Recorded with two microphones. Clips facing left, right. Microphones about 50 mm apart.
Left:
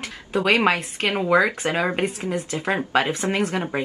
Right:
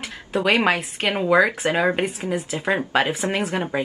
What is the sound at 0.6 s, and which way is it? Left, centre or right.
Speech, centre.